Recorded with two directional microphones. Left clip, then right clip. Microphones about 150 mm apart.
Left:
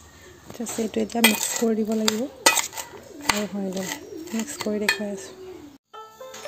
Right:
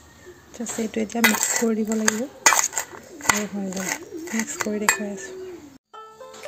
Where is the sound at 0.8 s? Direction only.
20° left (ahead or behind).